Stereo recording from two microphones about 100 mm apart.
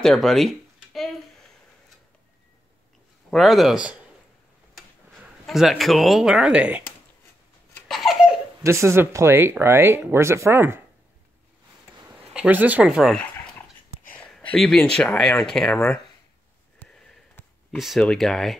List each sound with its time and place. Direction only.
0.0 s a sound: 5° left (ahead or behind)
3.3 s speech: centre (ahead or behind)
5.1 s speech: 5° right (ahead or behind)
7.9 s laughter: centre (ahead or behind)
8.6 s speech: 30° right (ahead or behind)
12.4 s speech: 15° right (ahead or behind)
12.8 s speech: 5° right (ahead or behind)
13.1 s dog: 10° left (ahead or behind)
14.1 s a sound: 15° left (ahead or behind)
14.5 s speech: 5° left (ahead or behind)
16.8 s sniff: 15° left (ahead or behind)
17.6 s speech: centre (ahead or behind)